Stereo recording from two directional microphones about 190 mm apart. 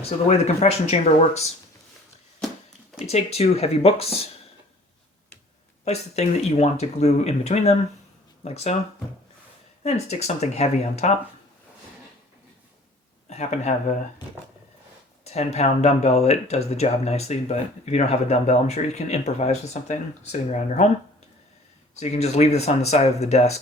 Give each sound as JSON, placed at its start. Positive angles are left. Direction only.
{"t": 0.0, "sound": "speech", "side_deg": 35}
{"t": 3.1, "sound": "speech", "side_deg": 35}
{"t": 5.8, "sound": "speech", "side_deg": 35}
{"t": 9.8, "sound": "speech", "side_deg": 35}
{"t": 13.3, "sound": "speech", "side_deg": 35}
{"t": 15.2, "sound": "speech", "side_deg": 35}
{"t": 21.9, "sound": "speech", "side_deg": 35}